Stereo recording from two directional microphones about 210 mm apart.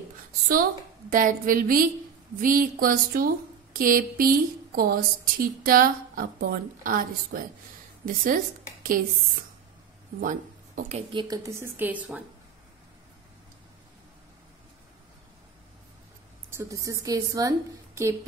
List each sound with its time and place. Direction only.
1.1 s a woman's voice: 40° right (ahead or behind)
10.2 s speech: 40° right (ahead or behind)
11.1 s a woman's voice: 15° right (ahead or behind)
16.4 s a woman's voice: 15° right (ahead or behind)